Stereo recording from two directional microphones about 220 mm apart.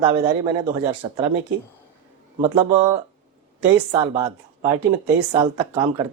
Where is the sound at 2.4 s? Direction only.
20° right (ahead or behind).